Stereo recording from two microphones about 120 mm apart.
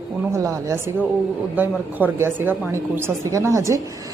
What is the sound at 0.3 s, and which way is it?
Speech, 25° right (ahead or behind).